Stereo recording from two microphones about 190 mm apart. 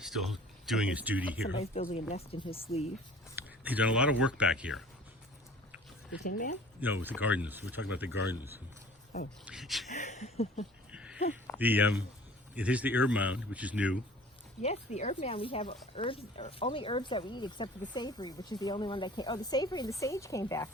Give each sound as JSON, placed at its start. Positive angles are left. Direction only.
{"t": 0.0, "sound": "speech", "side_deg": 0}
{"t": 1.8, "sound": "speech", "side_deg": 35}
{"t": 3.3, "sound": "speech", "side_deg": -10}
{"t": 6.2, "sound": "speech", "side_deg": 45}
{"t": 6.8, "sound": "a man's voice", "side_deg": -10}
{"t": 9.5, "sound": "speech", "side_deg": 0}
{"t": 9.9, "sound": "speech", "side_deg": 40}
{"t": 10.9, "sound": "a sound", "side_deg": -5}
{"t": 11.5, "sound": "a man's voice", "side_deg": -10}
{"t": 14.6, "sound": "speech", "side_deg": 35}